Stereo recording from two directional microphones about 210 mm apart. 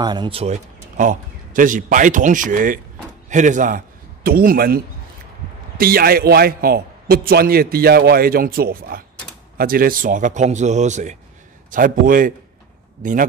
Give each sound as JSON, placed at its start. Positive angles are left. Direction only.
{"t": 0.0, "sound": "a man's voice", "side_deg": -20}